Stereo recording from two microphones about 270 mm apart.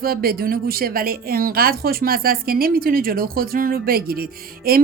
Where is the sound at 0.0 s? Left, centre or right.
Right.